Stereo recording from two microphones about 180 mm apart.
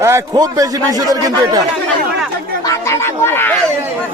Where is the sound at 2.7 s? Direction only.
15° left (ahead or behind).